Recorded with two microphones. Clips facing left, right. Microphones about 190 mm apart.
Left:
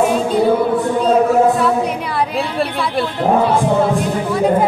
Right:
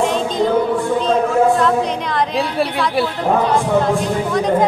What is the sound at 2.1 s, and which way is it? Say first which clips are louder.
A woman's voice: right 1 dB; 5° left (ahead or behind).